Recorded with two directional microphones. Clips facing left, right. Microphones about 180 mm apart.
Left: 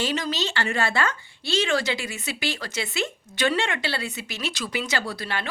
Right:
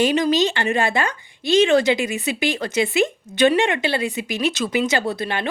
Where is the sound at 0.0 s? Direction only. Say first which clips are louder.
Right 9 dB; 15° right (ahead or behind).